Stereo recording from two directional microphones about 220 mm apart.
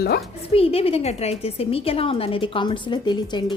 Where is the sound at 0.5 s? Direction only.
25° left (ahead or behind).